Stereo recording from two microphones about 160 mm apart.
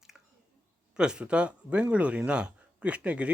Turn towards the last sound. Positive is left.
turn(degrees=-10)  # may be behind; listen again after turning